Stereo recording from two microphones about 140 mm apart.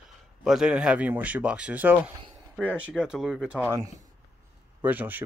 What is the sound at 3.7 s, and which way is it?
Speech, 25° right (ahead or behind).